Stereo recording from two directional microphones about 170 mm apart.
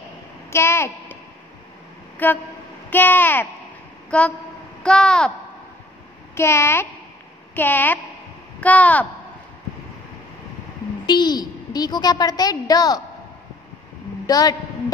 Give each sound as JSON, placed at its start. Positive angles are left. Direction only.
{"t": 0.5, "sound": "a woman's voice", "side_deg": 15}
{"t": 2.2, "sound": "a woman's voice", "side_deg": 10}
{"t": 6.3, "sound": "a woman's voice", "side_deg": 15}
{"t": 11.1, "sound": "a woman's voice", "side_deg": 25}
{"t": 14.2, "sound": "a woman's voice", "side_deg": 20}